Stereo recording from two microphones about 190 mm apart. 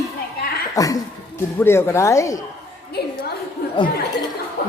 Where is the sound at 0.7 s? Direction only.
20° left (ahead or behind).